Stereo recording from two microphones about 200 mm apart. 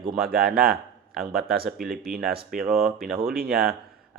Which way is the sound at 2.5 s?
Centre (ahead or behind).